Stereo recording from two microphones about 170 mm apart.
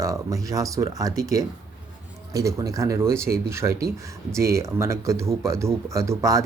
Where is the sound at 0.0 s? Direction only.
20° right (ahead or behind).